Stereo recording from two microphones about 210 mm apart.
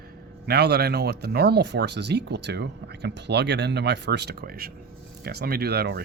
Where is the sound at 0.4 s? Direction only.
50° right (ahead or behind).